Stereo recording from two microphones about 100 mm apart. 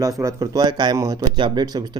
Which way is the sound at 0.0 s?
35° right (ahead or behind).